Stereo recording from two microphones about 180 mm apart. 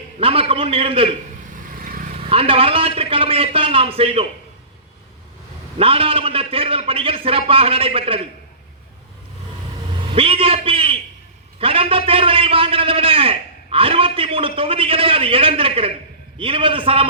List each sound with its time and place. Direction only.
0.2 s a man's voice: 30° right (ahead or behind)
1.7 s vehicle: 50° right (ahead or behind)
2.1 s a man's voice: 30° right (ahead or behind)
5.7 s a man's voice: 30° right (ahead or behind)
10.1 s a man's voice: 30° right (ahead or behind)